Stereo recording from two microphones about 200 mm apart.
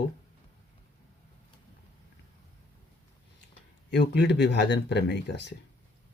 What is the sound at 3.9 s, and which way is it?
Speech, 60° left (ahead or behind).